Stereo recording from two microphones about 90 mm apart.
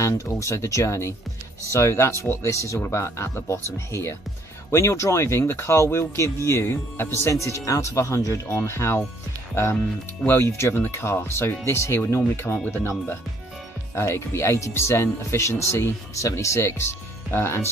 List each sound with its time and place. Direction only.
0.0 s speech: 35° left (ahead or behind)
10.2 s speech: 25° left (ahead or behind)
13.9 s speech: 30° left (ahead or behind)